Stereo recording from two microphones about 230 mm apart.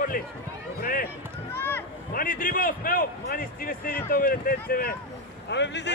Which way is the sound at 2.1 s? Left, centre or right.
Left.